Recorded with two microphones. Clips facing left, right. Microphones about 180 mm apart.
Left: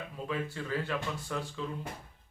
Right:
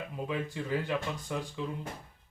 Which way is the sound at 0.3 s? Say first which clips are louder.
Right 1 dB; 15° right (ahead or behind).